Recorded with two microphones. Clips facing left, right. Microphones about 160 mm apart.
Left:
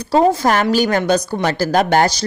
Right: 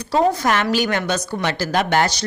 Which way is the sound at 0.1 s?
35° left (ahead or behind).